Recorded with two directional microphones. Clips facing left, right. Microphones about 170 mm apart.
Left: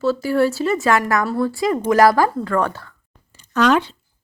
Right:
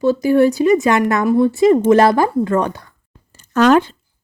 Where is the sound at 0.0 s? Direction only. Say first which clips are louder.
Right 5 dB; 15° right (ahead or behind).